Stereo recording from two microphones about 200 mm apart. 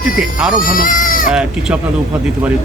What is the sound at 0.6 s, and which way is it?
Speech, 40° left (ahead or behind).